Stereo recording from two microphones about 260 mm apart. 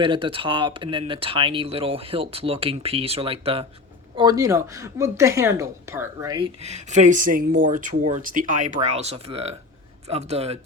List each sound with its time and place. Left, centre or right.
0.0 s speech: centre